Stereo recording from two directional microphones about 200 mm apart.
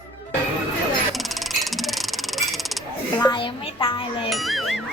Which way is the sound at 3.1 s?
20° left (ahead or behind).